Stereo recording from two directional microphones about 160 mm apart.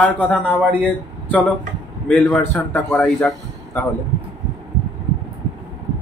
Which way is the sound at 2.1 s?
5° left (ahead or behind).